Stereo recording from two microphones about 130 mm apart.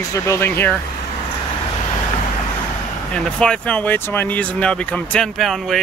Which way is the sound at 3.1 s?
5° left (ahead or behind).